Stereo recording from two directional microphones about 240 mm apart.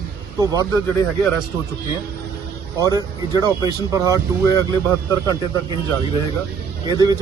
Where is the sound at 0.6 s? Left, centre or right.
Centre.